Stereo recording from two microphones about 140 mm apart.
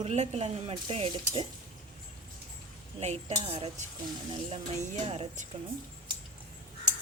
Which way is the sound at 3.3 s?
40° right (ahead or behind).